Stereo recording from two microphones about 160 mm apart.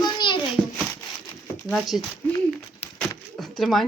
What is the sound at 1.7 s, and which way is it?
Speech, centre (ahead or behind).